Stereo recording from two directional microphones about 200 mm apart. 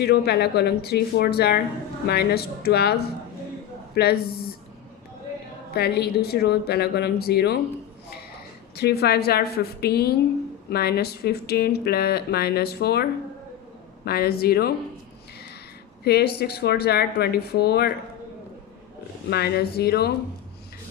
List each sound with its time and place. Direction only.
0.0 s speech: 55° left (ahead or behind)
5.7 s speech: 55° left (ahead or behind)
8.7 s speech: 55° left (ahead or behind)
16.0 s speech: 55° left (ahead or behind)
19.3 s speech: 55° left (ahead or behind)